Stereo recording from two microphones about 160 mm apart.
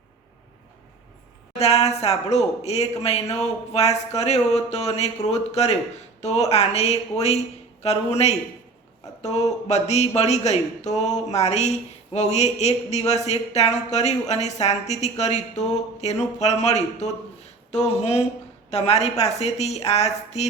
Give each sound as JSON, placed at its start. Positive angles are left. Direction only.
{"t": 1.5, "sound": "speech", "side_deg": 40}